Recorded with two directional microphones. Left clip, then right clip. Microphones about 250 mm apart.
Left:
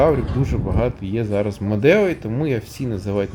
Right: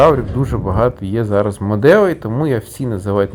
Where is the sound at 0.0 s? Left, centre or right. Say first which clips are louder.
Right 6 dB; centre.